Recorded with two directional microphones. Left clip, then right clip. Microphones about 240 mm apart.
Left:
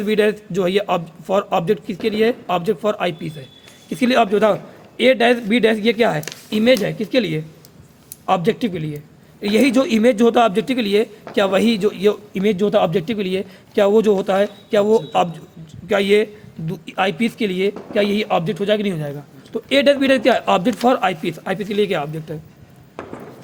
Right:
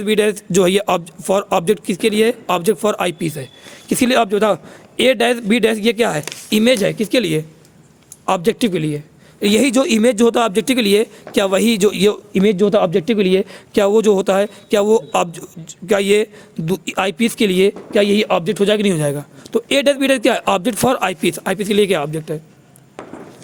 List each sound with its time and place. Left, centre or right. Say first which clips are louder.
0.0 s speech: right 1 dB; right